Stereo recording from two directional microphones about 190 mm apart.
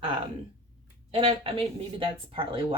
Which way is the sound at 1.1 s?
30° right (ahead or behind).